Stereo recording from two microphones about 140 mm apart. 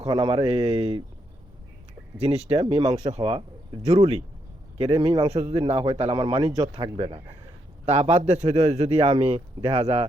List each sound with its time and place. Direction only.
0.1 s a man's voice: 35° right (ahead or behind)
2.1 s a man's voice: 45° right (ahead or behind)
4.8 s a man's voice: 40° right (ahead or behind)